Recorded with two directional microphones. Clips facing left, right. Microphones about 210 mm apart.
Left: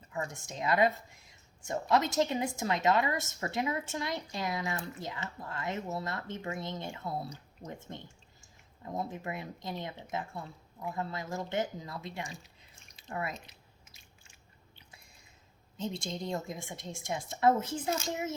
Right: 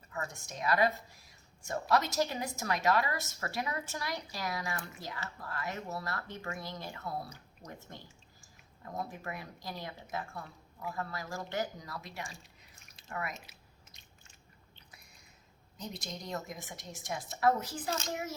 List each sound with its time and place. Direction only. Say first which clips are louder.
0.1 s speech: left 3 dB; 25° left (ahead or behind)
15.8 s speech: left 6 dB; 25° left (ahead or behind)